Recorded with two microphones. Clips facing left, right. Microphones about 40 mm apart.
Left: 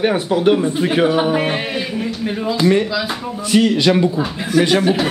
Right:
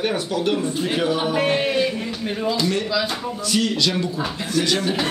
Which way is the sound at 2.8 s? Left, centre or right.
Centre.